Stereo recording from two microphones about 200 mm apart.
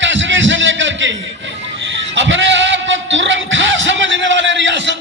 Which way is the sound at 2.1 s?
70° right (ahead or behind).